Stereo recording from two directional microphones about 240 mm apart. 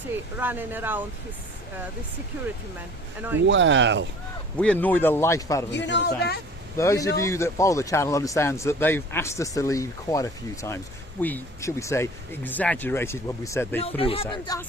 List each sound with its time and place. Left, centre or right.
0.3 s speech: centre
3.2 s speech: centre
3.4 s speech: right
4.5 s speech: centre
5.7 s speech: left
6.7 s speech: centre
13.8 s speech: left